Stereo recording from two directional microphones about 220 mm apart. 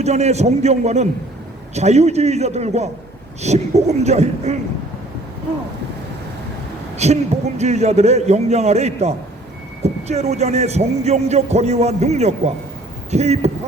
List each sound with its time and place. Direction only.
0.0 s a man's voice: 30° right (ahead or behind)
6.9 s a man's voice: 30° right (ahead or behind)